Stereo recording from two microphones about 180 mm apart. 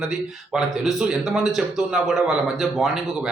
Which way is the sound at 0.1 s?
Centre (ahead or behind).